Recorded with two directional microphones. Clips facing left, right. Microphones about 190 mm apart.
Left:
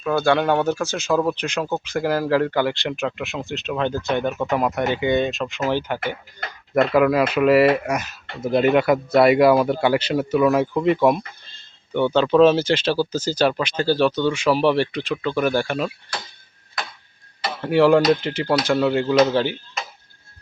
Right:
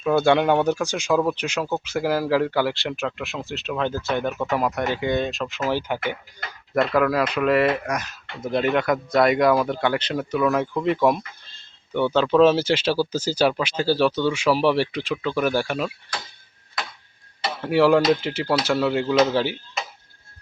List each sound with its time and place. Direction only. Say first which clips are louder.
0.0 s speech: right 1 dB; 20° right (ahead or behind)
6.7 s speech: left 3 dB; 5° left (ahead or behind)
11.9 s speech: left 2 dB; 5° right (ahead or behind)
17.6 s speech: left 2 dB; 5° right (ahead or behind)